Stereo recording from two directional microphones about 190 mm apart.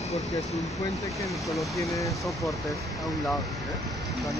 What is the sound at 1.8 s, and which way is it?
Speech, 15° left (ahead or behind).